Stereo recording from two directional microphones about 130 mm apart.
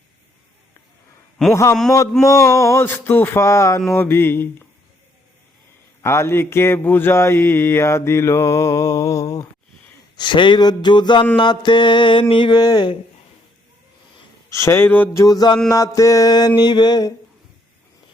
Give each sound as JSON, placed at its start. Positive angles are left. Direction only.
{"t": 1.4, "sound": "a man's voice", "side_deg": 5}
{"t": 2.2, "sound": "speech", "side_deg": 25}
{"t": 6.0, "sound": "speech", "side_deg": 20}
{"t": 10.2, "sound": "speech", "side_deg": 35}
{"t": 14.5, "sound": "speech", "side_deg": 20}
{"t": 15.2, "sound": "speech", "side_deg": 30}